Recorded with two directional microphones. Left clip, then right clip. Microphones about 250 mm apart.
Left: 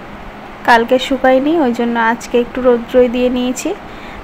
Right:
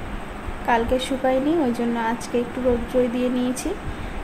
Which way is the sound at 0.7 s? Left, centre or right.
Centre.